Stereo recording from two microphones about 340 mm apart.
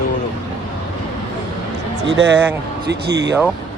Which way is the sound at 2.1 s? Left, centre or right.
Right.